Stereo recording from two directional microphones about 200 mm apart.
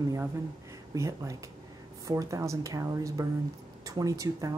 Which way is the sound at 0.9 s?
15° right (ahead or behind).